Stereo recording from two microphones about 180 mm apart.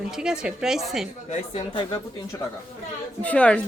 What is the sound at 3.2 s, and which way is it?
Speech, 5° left (ahead or behind).